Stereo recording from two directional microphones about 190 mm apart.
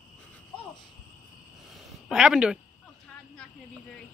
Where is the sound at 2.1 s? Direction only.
5° right (ahead or behind).